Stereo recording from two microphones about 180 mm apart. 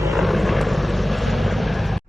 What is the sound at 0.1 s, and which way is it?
Vehicle, centre (ahead or behind).